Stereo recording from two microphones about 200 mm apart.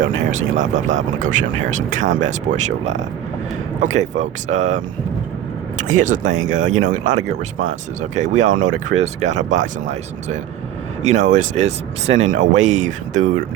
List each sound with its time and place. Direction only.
0.0 s speech: 70° right (ahead or behind)
0.7 s speech: 35° right (ahead or behind)
6.0 s speech: 40° right (ahead or behind)
8.9 s speech: 55° right (ahead or behind)
9.2 s speech: 35° right (ahead or behind)
12.0 s speech: 75° right (ahead or behind)
12.3 s speech: 40° right (ahead or behind)